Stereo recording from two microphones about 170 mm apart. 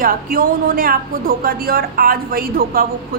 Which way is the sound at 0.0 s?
55° right (ahead or behind).